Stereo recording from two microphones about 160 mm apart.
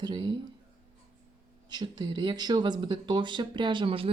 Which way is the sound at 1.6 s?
25° right (ahead or behind).